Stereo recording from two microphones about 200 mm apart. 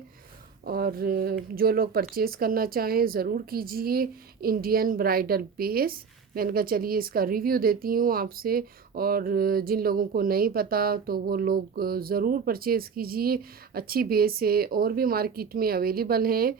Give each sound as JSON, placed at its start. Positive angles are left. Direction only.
{"t": 0.6, "sound": "speech", "side_deg": -50}